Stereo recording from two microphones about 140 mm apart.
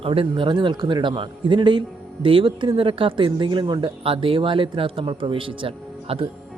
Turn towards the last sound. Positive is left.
turn(degrees=-40)  # may be behind; listen again after turning